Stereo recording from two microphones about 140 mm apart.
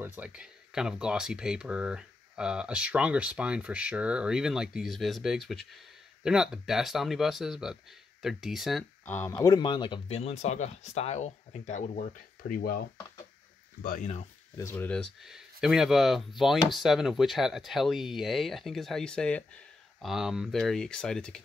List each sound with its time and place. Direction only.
0.0 s speech: 10° right (ahead or behind)
9.0 s speech: 15° left (ahead or behind)
9.3 s speech: 30° left (ahead or behind); by 12.8 s 85° left
14.6 s speech: 20° left (ahead or behind)
14.9 s speech: 5° left (ahead or behind)
20.1 s speech: 5° right (ahead or behind)